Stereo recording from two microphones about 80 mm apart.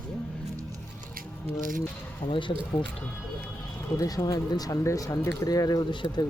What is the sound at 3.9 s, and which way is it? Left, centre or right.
Speech, left.